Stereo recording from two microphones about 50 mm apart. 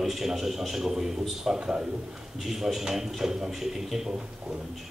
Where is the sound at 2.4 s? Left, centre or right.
Centre.